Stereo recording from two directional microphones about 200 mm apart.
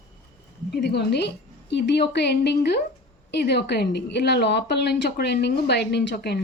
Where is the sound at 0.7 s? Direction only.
55° left (ahead or behind).